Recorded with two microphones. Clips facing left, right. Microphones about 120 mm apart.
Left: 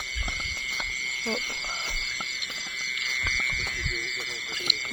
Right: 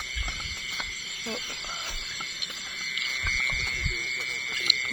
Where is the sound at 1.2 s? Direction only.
30° left (ahead or behind).